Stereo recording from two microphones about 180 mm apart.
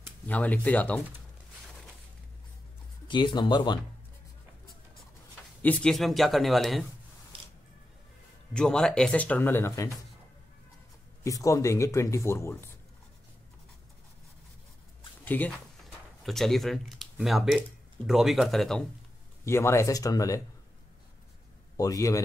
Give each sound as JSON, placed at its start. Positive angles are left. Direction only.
{"t": 0.3, "sound": "speech", "side_deg": 10}
{"t": 3.1, "sound": "speech", "side_deg": 25}
{"t": 5.6, "sound": "speech", "side_deg": 5}
{"t": 7.3, "sound": "music", "side_deg": -30}
{"t": 8.5, "sound": "speech", "side_deg": 5}
{"t": 11.2, "sound": "speech", "side_deg": 15}
{"t": 15.2, "sound": "speech", "side_deg": 10}
{"t": 19.4, "sound": "speech", "side_deg": 15}
{"t": 21.7, "sound": "speech", "side_deg": 20}